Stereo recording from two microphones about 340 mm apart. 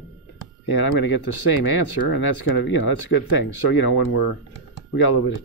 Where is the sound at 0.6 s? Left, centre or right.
Left.